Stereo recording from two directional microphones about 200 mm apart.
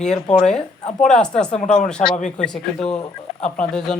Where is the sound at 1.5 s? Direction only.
35° left (ahead or behind).